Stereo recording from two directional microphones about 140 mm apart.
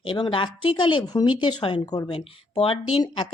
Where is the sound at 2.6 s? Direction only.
45° left (ahead or behind).